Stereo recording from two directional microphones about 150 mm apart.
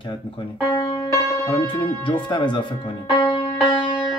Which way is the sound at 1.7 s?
35° left (ahead or behind).